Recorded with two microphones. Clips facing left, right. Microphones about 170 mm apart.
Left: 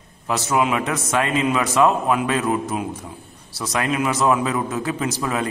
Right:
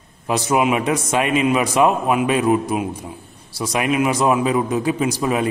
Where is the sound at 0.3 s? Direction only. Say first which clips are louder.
Right 3 dB; 15° right (ahead or behind).